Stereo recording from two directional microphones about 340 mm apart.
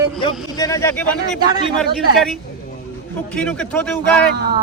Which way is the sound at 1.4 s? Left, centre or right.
Centre.